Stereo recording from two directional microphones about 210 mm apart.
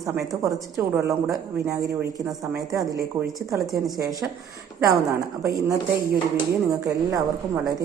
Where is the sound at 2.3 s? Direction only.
15° right (ahead or behind).